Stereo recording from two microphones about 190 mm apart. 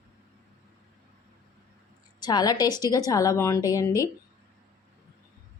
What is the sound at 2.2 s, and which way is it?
A woman's voice, 20° left (ahead or behind).